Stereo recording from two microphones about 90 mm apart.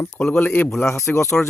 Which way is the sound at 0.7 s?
30° left (ahead or behind).